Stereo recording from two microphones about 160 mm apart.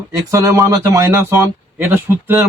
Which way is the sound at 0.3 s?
20° right (ahead or behind).